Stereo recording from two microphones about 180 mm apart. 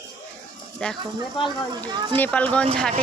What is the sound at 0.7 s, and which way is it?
Speech, 5° left (ahead or behind).